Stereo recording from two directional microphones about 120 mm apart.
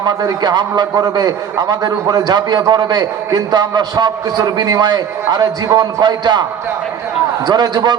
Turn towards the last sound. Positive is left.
turn(degrees=-35)  # may be behind; listen again after turning